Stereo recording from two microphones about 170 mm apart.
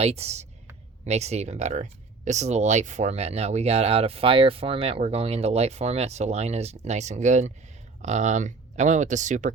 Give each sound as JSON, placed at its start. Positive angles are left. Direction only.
{"t": 0.0, "sound": "speech", "side_deg": -35}